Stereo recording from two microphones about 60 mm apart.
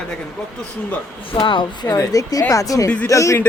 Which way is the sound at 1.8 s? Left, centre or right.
Left.